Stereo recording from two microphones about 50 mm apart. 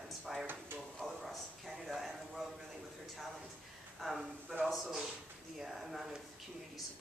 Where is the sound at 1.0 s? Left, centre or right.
Centre.